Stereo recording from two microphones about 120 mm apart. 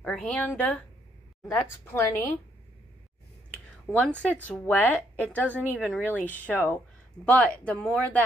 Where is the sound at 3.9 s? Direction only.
5° left (ahead or behind).